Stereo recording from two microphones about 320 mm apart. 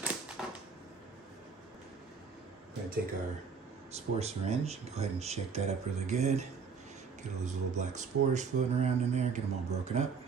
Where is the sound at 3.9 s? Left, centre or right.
Centre.